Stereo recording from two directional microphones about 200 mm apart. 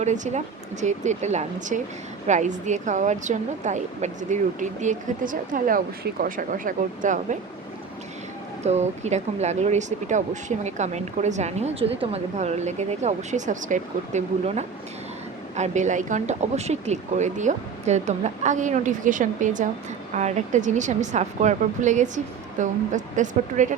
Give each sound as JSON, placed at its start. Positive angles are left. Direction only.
{"t": 0.0, "sound": "a woman's voice", "side_deg": -35}
{"t": 8.6, "sound": "a woman's voice", "side_deg": -35}